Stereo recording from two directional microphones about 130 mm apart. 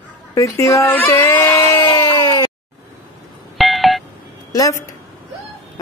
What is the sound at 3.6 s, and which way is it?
Telephone dialing, centre (ahead or behind).